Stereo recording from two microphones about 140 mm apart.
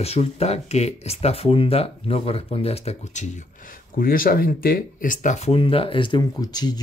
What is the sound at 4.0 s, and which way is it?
Speech, 90° left.